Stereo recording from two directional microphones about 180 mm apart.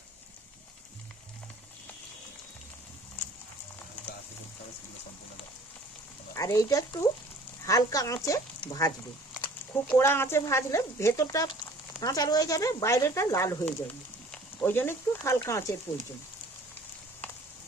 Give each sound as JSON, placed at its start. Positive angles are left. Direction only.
{"t": 6.3, "sound": "speech", "side_deg": 20}
{"t": 9.9, "sound": "speech", "side_deg": 15}